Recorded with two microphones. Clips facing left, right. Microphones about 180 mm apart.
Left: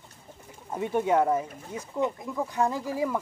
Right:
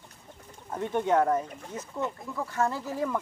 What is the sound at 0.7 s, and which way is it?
Speech, 10° left (ahead or behind).